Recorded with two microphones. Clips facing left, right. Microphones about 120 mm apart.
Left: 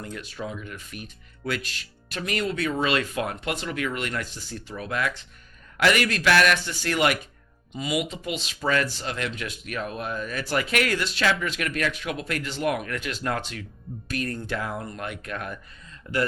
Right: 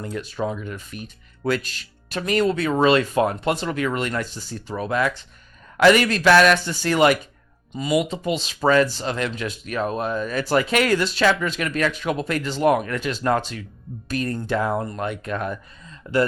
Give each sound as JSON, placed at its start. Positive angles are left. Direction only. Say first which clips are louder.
{"t": 0.0, "sound": "speech", "louder": "right 7 dB", "side_deg": -35}